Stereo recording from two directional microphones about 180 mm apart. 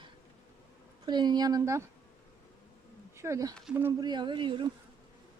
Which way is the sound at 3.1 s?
15° right (ahead or behind).